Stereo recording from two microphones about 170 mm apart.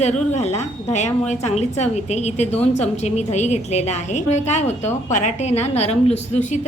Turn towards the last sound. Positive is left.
turn(degrees=45)  # may be behind; listen again after turning